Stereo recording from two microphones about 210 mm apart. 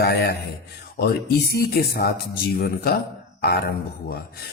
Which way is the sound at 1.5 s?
45° left (ahead or behind).